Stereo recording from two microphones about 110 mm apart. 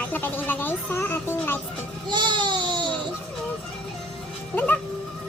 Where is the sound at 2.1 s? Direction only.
45° right (ahead or behind).